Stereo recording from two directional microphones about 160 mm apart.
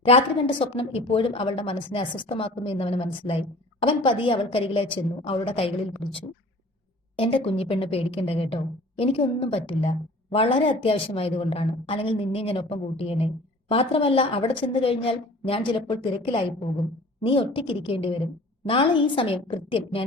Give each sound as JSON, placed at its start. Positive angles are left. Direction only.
{"t": 0.0, "sound": "a woman's voice", "side_deg": 35}
{"t": 7.2, "sound": "a woman's voice", "side_deg": 35}